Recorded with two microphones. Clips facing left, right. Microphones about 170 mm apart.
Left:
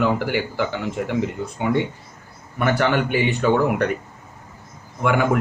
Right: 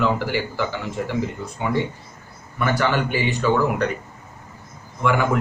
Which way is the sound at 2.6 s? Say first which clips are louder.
Left 2 dB; 55° left (ahead or behind).